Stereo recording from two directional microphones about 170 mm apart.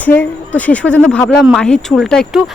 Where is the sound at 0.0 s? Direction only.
10° left (ahead or behind).